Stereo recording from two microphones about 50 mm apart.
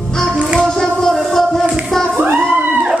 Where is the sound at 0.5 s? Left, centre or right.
Centre.